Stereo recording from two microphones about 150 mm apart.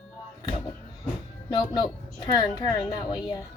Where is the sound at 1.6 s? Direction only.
25° left (ahead or behind).